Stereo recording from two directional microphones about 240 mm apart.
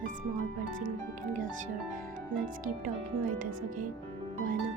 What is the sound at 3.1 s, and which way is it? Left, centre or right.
Speech, right.